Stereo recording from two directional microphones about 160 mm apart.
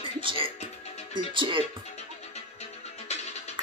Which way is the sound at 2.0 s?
40° left (ahead or behind).